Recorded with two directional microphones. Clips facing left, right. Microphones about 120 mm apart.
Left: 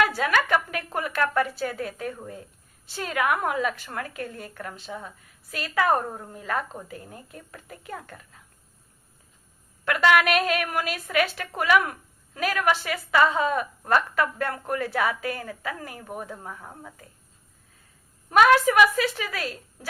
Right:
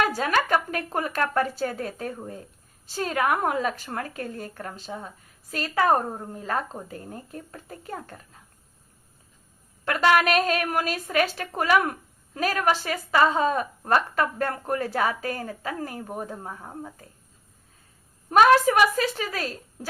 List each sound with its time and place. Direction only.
0.0 s a woman's voice: 35° right (ahead or behind)
9.8 s a woman's voice: 35° right (ahead or behind)
18.3 s a woman's voice: 35° right (ahead or behind)